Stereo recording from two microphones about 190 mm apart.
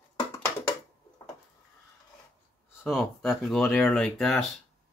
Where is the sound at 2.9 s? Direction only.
Centre (ahead or behind).